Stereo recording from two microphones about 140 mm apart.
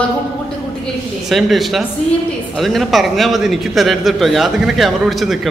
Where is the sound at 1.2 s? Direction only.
Centre (ahead or behind).